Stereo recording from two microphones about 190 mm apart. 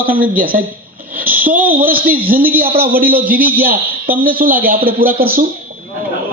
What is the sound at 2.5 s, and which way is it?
A man's voice, 50° right (ahead or behind).